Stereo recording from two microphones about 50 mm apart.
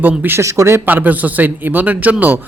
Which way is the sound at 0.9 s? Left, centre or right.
Right.